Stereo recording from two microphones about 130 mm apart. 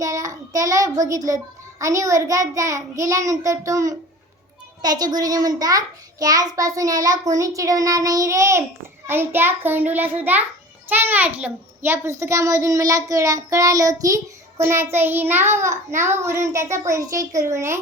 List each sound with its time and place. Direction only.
0.0 s child singing: 25° right (ahead or behind)
1.8 s a child's voice: 25° right (ahead or behind)